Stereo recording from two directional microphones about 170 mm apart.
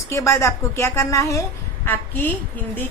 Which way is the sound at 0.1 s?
15° left (ahead or behind).